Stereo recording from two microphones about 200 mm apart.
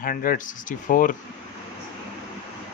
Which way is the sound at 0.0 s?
45° left (ahead or behind).